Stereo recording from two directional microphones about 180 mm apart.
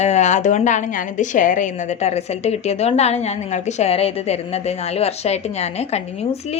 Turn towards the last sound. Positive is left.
turn(degrees=35)  # may be behind; listen again after turning